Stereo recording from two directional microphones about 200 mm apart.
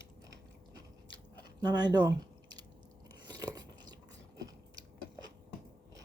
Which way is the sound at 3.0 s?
20° right (ahead or behind).